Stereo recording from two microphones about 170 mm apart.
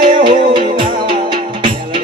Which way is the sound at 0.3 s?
30° right (ahead or behind).